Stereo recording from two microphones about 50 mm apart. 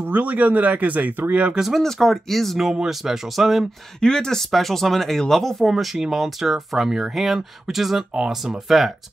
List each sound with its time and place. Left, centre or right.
0.0 s speech: right
1.8 s speech: centre
2.7 s speech: centre
4.0 s speech: centre